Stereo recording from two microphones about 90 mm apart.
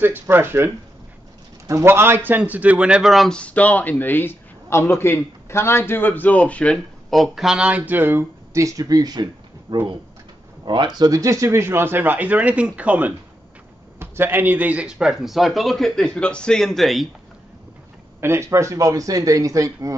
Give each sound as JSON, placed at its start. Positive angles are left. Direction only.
{"t": 0.0, "sound": "speech", "side_deg": -25}
{"t": 1.7, "sound": "speech", "side_deg": -30}
{"t": 3.0, "sound": "speech", "side_deg": 0}
{"t": 3.3, "sound": "a man's voice", "side_deg": 15}
{"t": 7.1, "sound": "a man's voice", "side_deg": 0}
{"t": 16.2, "sound": "speech", "side_deg": 10}
{"t": 18.2, "sound": "speech", "side_deg": -30}